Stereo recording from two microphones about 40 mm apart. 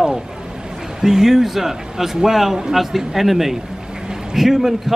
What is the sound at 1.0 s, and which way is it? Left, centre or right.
A man's voice, centre.